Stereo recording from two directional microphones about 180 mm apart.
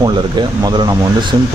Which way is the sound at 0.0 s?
25° right (ahead or behind).